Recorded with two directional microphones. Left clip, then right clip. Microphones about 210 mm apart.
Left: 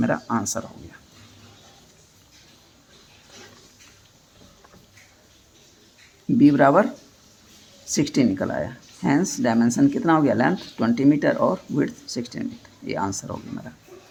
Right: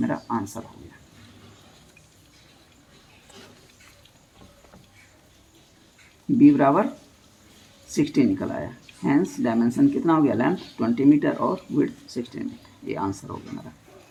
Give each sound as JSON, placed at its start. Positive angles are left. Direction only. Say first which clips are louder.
{"t": 0.0, "sound": "speech", "louder": "left 3 dB", "side_deg": 30}
{"t": 6.4, "sound": "speech", "louder": "left 2 dB", "side_deg": 30}
{"t": 7.9, "sound": "speech", "louder": "even", "side_deg": 30}